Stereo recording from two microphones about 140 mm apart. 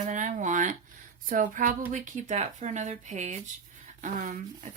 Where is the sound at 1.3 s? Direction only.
70° right (ahead or behind).